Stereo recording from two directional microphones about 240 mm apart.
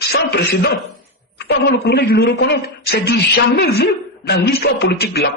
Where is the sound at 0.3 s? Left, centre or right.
Left.